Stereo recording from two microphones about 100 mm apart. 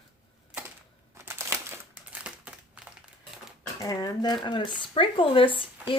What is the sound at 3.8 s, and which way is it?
Speech, 35° left (ahead or behind).